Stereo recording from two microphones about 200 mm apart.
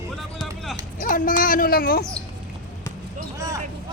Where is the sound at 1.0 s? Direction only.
40° left (ahead or behind).